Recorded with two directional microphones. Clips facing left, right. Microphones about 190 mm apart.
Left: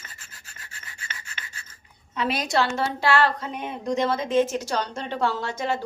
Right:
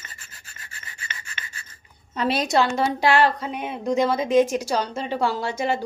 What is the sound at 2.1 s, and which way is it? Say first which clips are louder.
Speech: right 3 dB; 35° right (ahead or behind).